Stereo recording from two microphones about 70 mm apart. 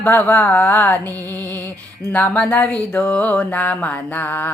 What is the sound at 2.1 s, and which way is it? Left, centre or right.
Mantra, left.